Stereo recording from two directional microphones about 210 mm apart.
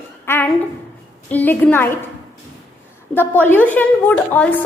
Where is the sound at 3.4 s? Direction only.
5° left (ahead or behind).